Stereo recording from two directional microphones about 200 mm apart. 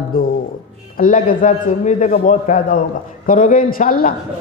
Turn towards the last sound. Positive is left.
turn(degrees=45)  # may be behind; listen again after turning